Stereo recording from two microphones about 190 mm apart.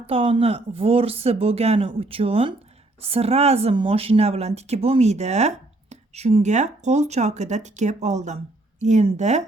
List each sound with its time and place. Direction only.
0.0 s speech: 30° right (ahead or behind)